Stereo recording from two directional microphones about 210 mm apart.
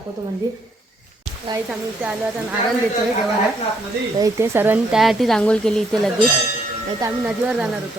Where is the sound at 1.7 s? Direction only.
5° right (ahead or behind).